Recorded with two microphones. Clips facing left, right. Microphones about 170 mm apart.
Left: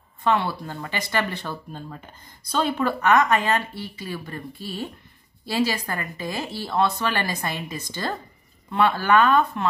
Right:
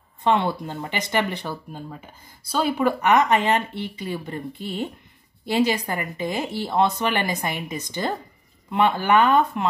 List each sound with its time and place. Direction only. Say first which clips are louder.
0.2 s speech: right 2 dB; 20° right (ahead or behind)